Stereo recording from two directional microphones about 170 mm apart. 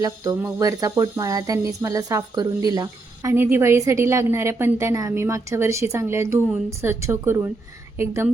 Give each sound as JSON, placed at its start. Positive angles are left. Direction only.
{"t": 0.0, "sound": "speech", "side_deg": -20}